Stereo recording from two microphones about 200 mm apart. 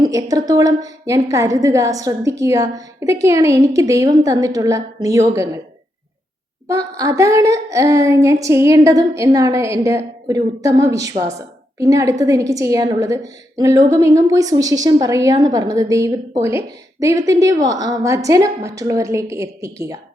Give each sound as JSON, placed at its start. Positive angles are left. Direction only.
{"t": 0.0, "sound": "a woman's voice", "side_deg": -15}
{"t": 6.7, "sound": "a woman's voice", "side_deg": -15}